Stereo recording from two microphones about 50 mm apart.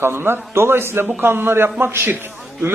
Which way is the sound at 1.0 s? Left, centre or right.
Right.